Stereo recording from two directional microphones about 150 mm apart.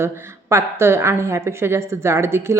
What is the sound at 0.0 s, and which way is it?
A woman's voice, 15° right (ahead or behind).